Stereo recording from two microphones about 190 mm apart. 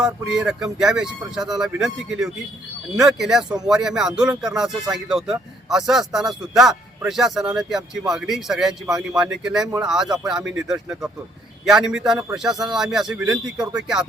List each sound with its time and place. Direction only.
0.3 s speech: 5° right (ahead or behind)
13.6 s speech: 20° right (ahead or behind)